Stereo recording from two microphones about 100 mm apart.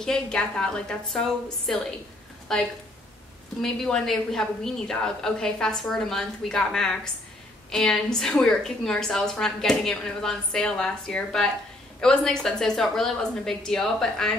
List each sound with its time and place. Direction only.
0.0 s a woman's voice: 5° left (ahead or behind)